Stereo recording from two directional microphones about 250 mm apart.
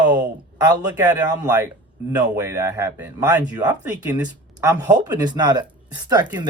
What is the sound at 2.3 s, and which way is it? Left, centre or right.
Speech, centre.